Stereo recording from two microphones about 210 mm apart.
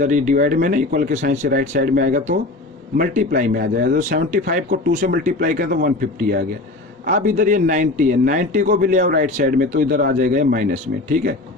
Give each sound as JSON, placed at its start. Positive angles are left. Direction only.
{"t": 0.0, "sound": "a man's voice", "side_deg": -35}